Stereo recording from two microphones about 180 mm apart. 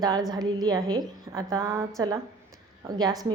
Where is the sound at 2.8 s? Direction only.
20° right (ahead or behind).